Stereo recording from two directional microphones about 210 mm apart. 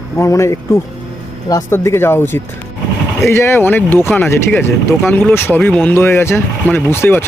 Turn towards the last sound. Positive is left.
turn(degrees=10)  # may be behind; listen again after turning